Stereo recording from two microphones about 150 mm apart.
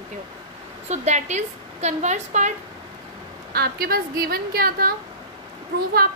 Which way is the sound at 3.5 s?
85° right.